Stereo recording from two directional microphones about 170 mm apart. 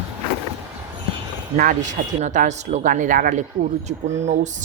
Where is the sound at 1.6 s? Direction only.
50° right (ahead or behind).